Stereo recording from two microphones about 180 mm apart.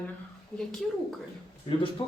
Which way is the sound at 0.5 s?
5° left (ahead or behind).